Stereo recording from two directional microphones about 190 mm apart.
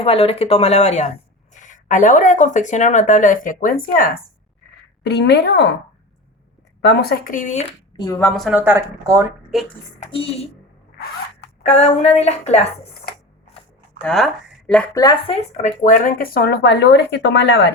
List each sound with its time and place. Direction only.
0.0 s speech: 30° left (ahead or behind); by 4.2 s 50° left (ahead or behind)
5.0 s speech: 65° left (ahead or behind)
6.8 s speech: 60° left (ahead or behind); by 7.7 s 40° left (ahead or behind)
7.9 s speech: 15° left (ahead or behind)
8.3 s speech: centre (ahead or behind)
9.5 s a woman's voice: centre (ahead or behind)
10.0 s speech: 30° left (ahead or behind)
11.6 s speech: 35° left (ahead or behind)
14.0 s speech: centre (ahead or behind)
14.9 s speech: 20° left (ahead or behind)
15.3 s speech: 35° left (ahead or behind); by 17.7 s 65° left (ahead or behind)